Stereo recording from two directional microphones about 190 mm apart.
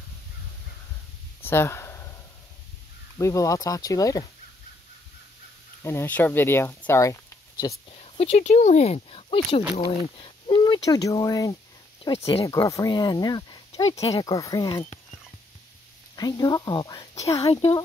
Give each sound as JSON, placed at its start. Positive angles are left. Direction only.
{"t": 1.4, "sound": "a sound", "side_deg": 10}
{"t": 3.2, "sound": "speech", "side_deg": 15}
{"t": 5.8, "sound": "speech", "side_deg": 15}
{"t": 8.0, "sound": "speech", "side_deg": 35}
{"t": 12.2, "sound": "speech", "side_deg": 30}
{"t": 12.4, "sound": "speech", "side_deg": 15}
{"t": 16.2, "sound": "speech", "side_deg": 20}
{"t": 17.4, "sound": "speech", "side_deg": 30}